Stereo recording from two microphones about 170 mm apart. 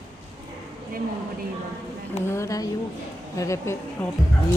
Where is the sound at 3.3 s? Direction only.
20° left (ahead or behind).